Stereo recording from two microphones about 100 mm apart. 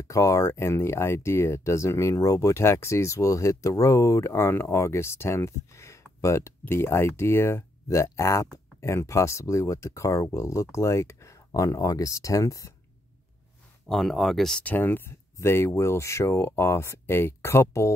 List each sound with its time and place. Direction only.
0.0 s speech: 30° left (ahead or behind)
13.8 s speech: centre (ahead or behind)
14.6 s speech: 20° left (ahead or behind)